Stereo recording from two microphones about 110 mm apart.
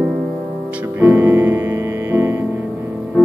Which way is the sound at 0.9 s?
20° right (ahead or behind).